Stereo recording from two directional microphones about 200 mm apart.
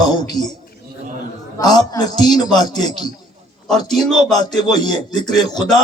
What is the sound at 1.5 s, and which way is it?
A man's voice, 20° left (ahead or behind).